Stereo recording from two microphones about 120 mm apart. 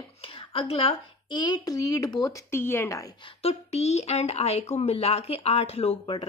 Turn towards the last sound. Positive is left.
turn(degrees=55)  # may be behind; listen again after turning